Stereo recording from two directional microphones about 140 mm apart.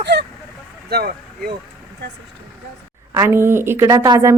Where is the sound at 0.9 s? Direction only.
90° right.